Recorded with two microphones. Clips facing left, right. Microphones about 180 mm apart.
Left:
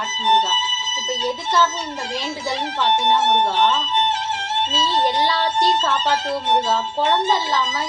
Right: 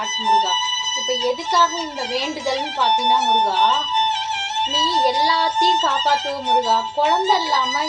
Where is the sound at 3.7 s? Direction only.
55° left (ahead or behind).